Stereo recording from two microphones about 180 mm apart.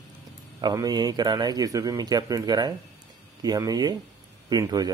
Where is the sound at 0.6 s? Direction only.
20° right (ahead or behind).